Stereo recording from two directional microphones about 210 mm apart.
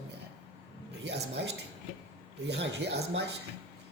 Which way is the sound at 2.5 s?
55° right (ahead or behind).